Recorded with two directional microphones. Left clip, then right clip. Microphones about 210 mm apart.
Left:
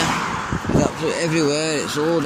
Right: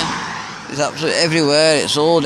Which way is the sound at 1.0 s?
25° right (ahead or behind).